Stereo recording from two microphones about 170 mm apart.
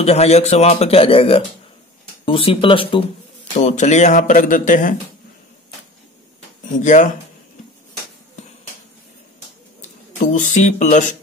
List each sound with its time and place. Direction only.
0.0 s a man's voice: 40° left (ahead or behind)
3.5 s speech: 45° left (ahead or behind)
6.8 s speech: 45° left (ahead or behind)
9.8 s a sound: 50° left (ahead or behind)